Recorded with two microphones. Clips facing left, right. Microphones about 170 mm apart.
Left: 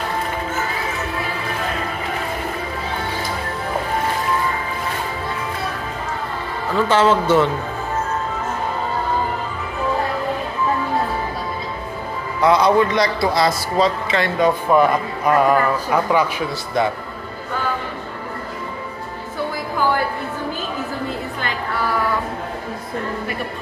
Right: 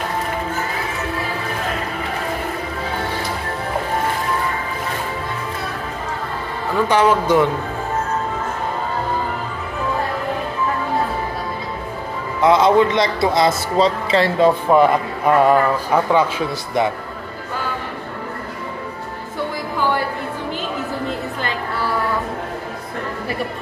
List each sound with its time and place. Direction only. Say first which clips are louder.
6.7 s a man's voice: even; 15° right (ahead or behind)
12.4 s a man's voice: right 1 dB; 20° right (ahead or behind)